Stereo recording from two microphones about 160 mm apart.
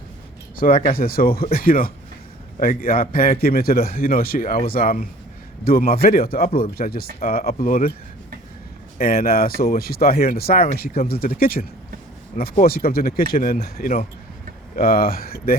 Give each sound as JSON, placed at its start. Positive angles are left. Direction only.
{"t": 0.5, "sound": "a man's voice", "side_deg": 60}
{"t": 9.0, "sound": "a man's voice", "side_deg": 70}